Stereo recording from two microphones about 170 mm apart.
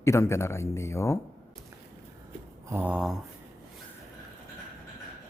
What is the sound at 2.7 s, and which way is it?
Speech, 10° right (ahead or behind).